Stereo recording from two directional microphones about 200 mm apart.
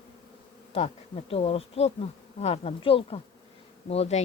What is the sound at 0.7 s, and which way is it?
Bee, 30° left (ahead or behind).